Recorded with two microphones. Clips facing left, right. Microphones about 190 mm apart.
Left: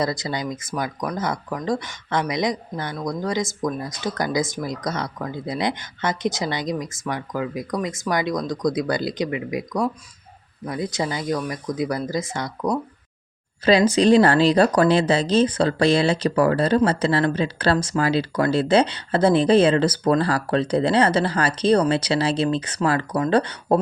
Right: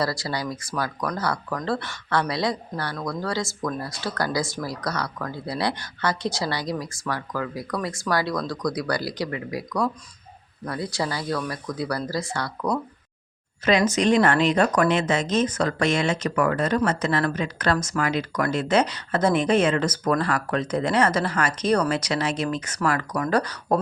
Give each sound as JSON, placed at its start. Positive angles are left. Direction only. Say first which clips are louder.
{"t": 0.0, "sound": "speech", "louder": "left 2 dB", "side_deg": 20}
{"t": 13.7, "sound": "speech", "louder": "left 4 dB", "side_deg": 30}